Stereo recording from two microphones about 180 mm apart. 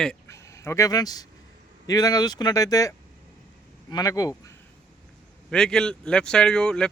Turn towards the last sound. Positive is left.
turn(degrees=5)  # may be behind; listen again after turning